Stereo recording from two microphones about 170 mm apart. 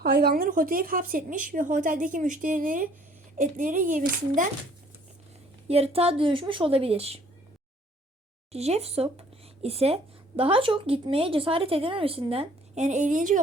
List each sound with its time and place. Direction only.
0.0 s a woman's voice: 65° right (ahead or behind); by 4.4 s 50° right (ahead or behind)
5.6 s a woman's voice: 35° right (ahead or behind)
8.5 s a woman's voice: 40° right (ahead or behind)